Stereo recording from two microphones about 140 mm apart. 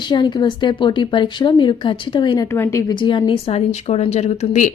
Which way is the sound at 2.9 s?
35° left (ahead or behind).